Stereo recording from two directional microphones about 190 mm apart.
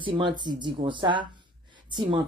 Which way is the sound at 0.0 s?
25° right (ahead or behind).